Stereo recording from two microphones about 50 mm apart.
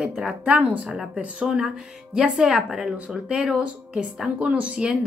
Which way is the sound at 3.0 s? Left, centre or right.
Centre.